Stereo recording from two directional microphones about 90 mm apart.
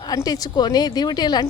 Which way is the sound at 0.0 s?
45° left (ahead or behind).